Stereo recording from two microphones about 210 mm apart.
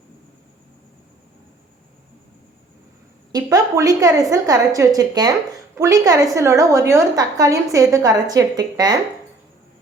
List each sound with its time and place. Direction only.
3.3 s a woman's voice: 15° right (ahead or behind)